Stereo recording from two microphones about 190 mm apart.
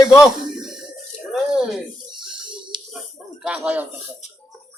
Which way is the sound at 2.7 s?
25° right (ahead or behind).